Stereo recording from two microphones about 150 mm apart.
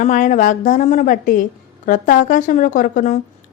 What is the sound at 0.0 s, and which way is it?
A woman's voice, 60° left (ahead or behind).